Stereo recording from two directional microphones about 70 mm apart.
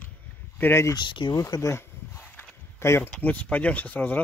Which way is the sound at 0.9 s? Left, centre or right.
Left.